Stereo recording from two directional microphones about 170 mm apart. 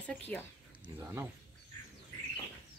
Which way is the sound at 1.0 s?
15° right (ahead or behind).